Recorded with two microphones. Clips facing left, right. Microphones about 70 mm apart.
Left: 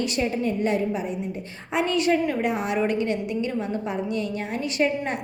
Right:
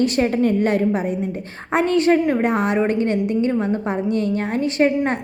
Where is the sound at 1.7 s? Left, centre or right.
Right.